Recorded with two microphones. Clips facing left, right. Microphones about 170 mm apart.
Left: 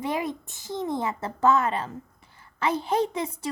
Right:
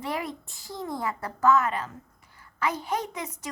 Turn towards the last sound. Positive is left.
turn(degrees=30)  # may be behind; listen again after turning